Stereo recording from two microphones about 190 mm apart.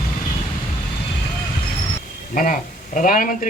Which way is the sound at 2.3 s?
45° left (ahead or behind).